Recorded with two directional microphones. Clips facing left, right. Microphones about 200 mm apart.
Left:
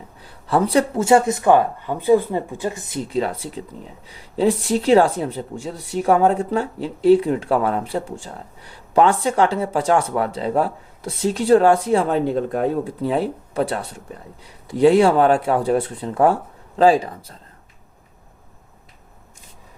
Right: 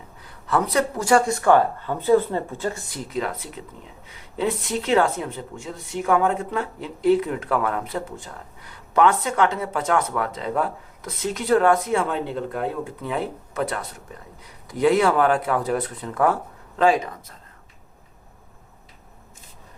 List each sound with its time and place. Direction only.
0.4 s speech: 30° left (ahead or behind)
3.1 s a woman's voice: 30° left (ahead or behind)